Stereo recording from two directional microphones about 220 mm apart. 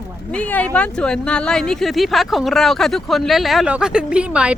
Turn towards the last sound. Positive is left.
turn(degrees=-5)  # may be behind; listen again after turning